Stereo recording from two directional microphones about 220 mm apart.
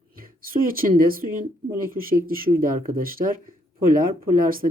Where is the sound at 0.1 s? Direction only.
40° right (ahead or behind).